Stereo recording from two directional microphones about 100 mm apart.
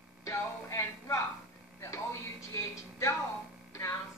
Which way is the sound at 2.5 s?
30° left (ahead or behind).